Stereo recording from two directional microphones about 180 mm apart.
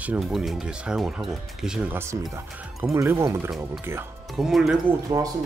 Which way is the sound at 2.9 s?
15° right (ahead or behind).